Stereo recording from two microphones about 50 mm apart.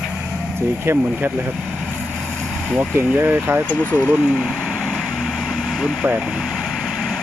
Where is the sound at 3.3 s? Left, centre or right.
Right.